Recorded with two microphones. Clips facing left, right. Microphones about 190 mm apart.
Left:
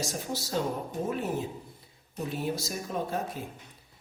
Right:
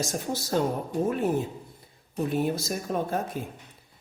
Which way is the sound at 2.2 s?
55° right (ahead or behind).